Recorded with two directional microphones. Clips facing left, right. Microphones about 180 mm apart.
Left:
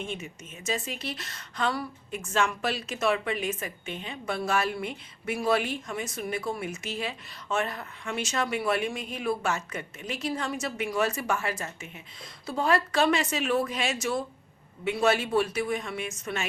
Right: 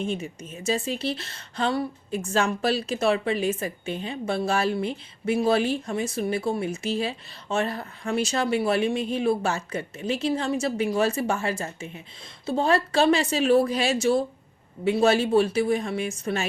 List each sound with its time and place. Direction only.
0.0 s a woman's voice: 35° right (ahead or behind)